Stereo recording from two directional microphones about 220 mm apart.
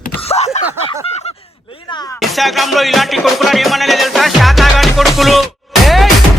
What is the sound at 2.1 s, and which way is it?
Music, centre (ahead or behind).